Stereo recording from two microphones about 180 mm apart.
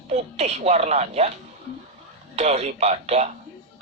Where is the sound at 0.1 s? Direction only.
40° right (ahead or behind).